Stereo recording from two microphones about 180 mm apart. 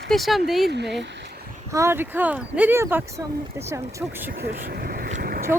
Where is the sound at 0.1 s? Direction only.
Centre (ahead or behind).